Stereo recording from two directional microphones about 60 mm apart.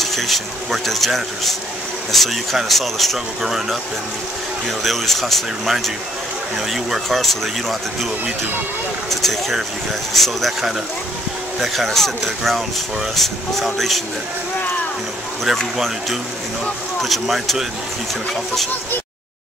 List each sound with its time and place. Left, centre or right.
0.0 s speech: centre
4.8 s speech: centre
9.1 s speech: centre
11.6 s speech: centre
15.4 s speech: centre